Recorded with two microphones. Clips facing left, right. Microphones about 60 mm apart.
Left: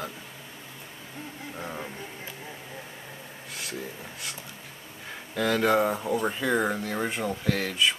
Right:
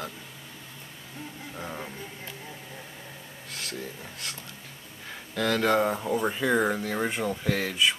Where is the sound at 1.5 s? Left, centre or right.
Centre.